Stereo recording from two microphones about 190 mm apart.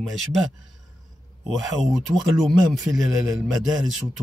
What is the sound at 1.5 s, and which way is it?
Speech, centre (ahead or behind).